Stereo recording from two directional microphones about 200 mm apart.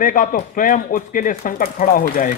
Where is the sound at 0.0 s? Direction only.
40° left (ahead or behind).